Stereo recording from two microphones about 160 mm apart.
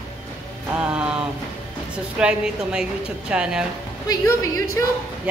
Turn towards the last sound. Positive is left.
turn(degrees=20)  # may be behind; listen again after turning